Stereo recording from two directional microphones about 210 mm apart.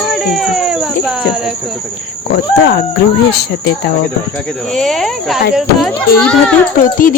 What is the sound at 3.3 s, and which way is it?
Speech, 50° left (ahead or behind).